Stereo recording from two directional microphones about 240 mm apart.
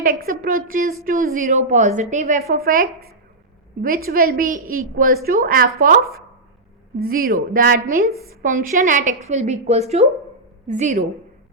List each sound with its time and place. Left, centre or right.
0.0 s a woman's voice: right